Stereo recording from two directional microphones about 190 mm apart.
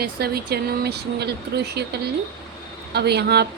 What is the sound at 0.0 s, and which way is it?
Speech, 55° right (ahead or behind).